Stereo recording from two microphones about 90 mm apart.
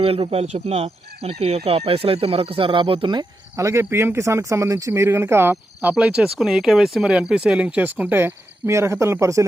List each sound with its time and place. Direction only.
0.0 s speech: 90° right
3.5 s speech: 30° right (ahead or behind)
8.2 s speech: 30° right (ahead or behind)